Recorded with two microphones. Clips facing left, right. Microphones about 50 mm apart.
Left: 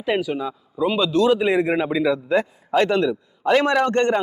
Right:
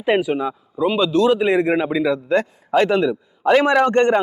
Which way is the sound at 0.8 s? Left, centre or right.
Centre.